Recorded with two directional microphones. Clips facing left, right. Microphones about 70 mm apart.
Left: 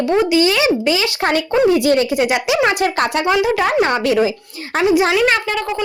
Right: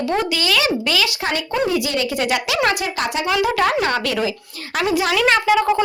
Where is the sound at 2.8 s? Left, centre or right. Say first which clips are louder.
Left 6 dB; left.